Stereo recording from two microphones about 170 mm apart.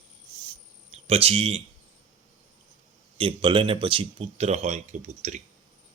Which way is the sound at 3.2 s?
30° right (ahead or behind).